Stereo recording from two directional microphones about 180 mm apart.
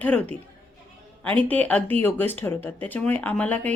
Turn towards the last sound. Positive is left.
turn(degrees=10)  # may be behind; listen again after turning